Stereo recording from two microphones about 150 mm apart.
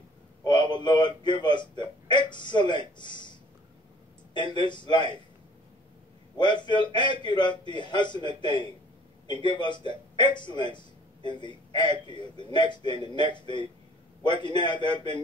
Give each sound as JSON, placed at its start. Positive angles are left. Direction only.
{"t": 0.4, "sound": "a man's voice", "side_deg": 30}
{"t": 4.6, "sound": "a man's voice", "side_deg": 30}
{"t": 6.3, "sound": "a man's voice", "side_deg": 30}